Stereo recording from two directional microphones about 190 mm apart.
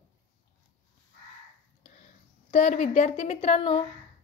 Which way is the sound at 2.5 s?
40° left (ahead or behind).